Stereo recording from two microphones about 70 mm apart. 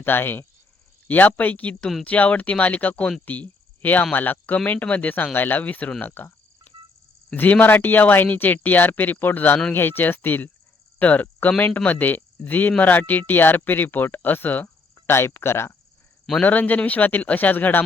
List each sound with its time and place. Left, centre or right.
0.0 s speech: left
3.2 s cricket: left
4.1 s speech: left
7.3 s speech: left
16.4 s speech: left